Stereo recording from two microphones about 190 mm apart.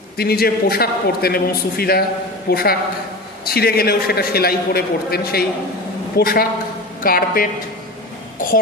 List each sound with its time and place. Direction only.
0.2 s a man's voice: 55° left (ahead or behind)